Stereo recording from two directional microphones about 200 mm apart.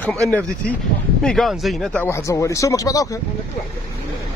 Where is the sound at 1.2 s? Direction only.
Centre (ahead or behind); by 3.2 s 15° left (ahead or behind).